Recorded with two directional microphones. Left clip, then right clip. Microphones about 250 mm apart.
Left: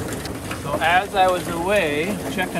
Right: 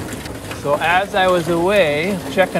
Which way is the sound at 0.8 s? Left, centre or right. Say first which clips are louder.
Even; right.